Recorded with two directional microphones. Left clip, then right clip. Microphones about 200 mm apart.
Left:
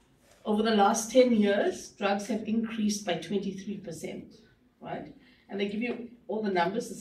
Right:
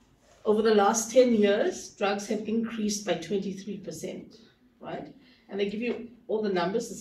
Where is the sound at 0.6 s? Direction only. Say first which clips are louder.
Even; 30° left (ahead or behind).